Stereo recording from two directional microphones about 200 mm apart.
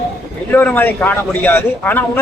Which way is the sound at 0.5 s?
10° left (ahead or behind).